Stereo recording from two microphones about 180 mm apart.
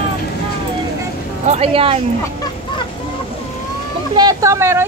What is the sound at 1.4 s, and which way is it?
Speech, 35° right (ahead or behind).